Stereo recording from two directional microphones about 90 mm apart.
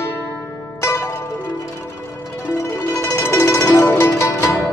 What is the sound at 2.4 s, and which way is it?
Music, 30° left (ahead or behind).